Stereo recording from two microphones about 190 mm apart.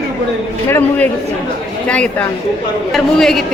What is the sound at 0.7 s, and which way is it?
A man's voice, 10° left (ahead or behind).